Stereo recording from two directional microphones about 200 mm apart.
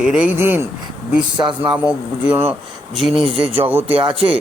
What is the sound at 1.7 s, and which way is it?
Speech, 5° right (ahead or behind).